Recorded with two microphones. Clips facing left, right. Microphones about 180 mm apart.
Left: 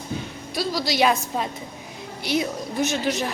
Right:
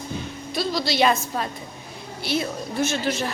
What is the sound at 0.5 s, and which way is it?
A woman's voice, 10° left (ahead or behind).